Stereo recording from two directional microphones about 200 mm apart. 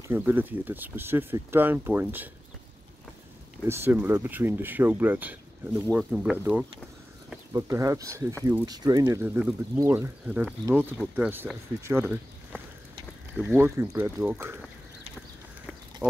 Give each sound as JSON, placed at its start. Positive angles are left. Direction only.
{"t": 0.1, "sound": "speech", "side_deg": -10}
{"t": 3.6, "sound": "speech", "side_deg": -10}
{"t": 16.0, "sound": "a sound", "side_deg": 10}